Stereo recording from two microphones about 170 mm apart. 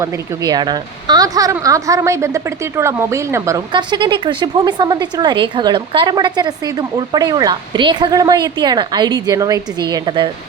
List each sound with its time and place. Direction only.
0.0 s speech: 25° right (ahead or behind)